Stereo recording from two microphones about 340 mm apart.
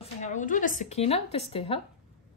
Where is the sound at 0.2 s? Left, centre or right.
Left.